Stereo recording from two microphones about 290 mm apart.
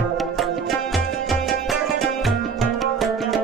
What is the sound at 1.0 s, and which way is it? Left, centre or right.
Music, left.